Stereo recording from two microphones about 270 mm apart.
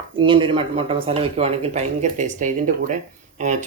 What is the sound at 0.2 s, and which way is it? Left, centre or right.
Speech, centre.